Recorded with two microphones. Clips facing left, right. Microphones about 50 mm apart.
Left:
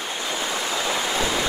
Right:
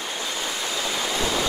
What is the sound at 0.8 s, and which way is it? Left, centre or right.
Waves, centre.